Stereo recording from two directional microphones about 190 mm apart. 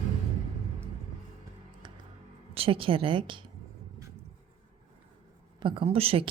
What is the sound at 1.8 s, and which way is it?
Music, 25° right (ahead or behind).